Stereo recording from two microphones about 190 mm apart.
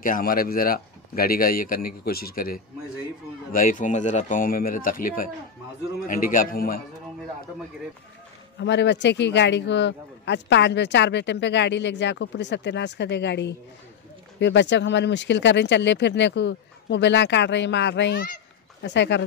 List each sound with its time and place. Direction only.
0.0 s a man's voice: 50° left (ahead or behind)
8.5 s speech: 65° left (ahead or behind)